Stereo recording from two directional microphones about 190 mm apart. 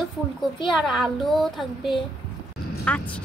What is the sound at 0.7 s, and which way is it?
A child's voice, centre (ahead or behind).